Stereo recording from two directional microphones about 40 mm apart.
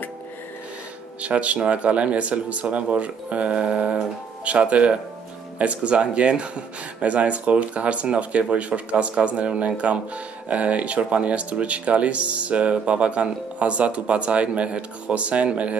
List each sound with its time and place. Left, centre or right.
1.2 s speech: right